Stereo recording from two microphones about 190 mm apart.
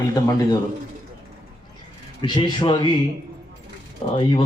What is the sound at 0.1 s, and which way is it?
Speech, 20° left (ahead or behind).